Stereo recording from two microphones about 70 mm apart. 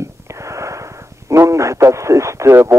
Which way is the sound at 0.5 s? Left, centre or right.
Right.